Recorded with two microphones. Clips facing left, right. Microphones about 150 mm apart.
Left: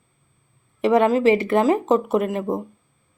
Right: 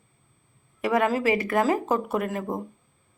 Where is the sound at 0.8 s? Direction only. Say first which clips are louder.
Left 7 dB; 25° left (ahead or behind).